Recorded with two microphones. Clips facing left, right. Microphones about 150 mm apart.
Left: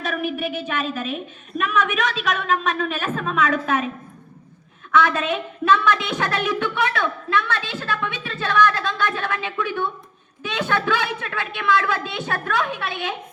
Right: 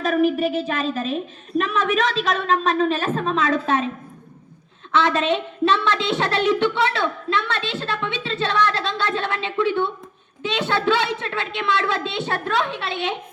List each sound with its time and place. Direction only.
0.0 s a woman's voice: 35° right (ahead or behind)
4.9 s a woman's voice: 25° right (ahead or behind)